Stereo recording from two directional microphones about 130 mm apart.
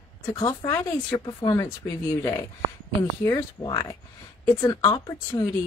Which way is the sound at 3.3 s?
30° left (ahead or behind).